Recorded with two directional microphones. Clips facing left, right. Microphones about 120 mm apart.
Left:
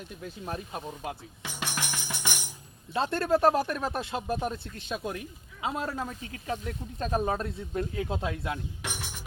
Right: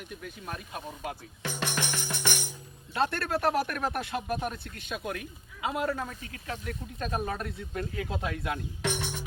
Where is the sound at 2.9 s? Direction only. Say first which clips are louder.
Left 3 dB; 25° left (ahead or behind).